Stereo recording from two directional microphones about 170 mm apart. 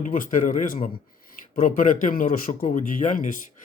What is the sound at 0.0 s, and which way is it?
Speech, 50° left (ahead or behind).